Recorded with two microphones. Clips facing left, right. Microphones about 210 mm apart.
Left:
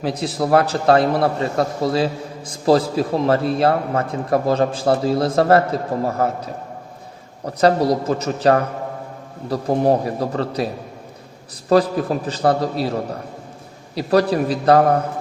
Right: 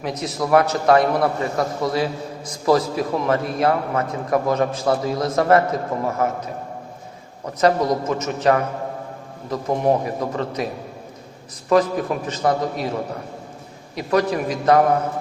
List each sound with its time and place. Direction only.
0.0 s a man's voice: 30° left (ahead or behind)
7.4 s a man's voice: 35° left (ahead or behind)
11.7 s a man's voice: 35° left (ahead or behind)
13.9 s a man's voice: 35° left (ahead or behind)